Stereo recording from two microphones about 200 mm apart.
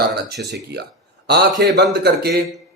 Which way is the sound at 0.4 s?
55° right (ahead or behind).